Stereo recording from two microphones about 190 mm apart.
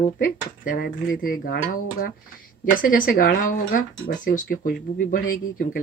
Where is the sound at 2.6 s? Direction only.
45° left (ahead or behind).